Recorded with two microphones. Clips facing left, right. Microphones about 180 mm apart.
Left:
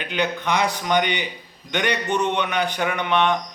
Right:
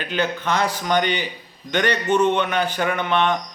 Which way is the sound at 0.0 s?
15° left (ahead or behind).